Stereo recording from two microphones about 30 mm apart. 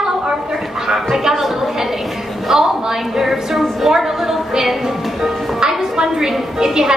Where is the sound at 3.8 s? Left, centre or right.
Centre.